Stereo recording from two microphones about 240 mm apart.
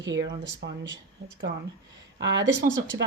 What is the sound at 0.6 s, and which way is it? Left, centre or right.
Speech, right.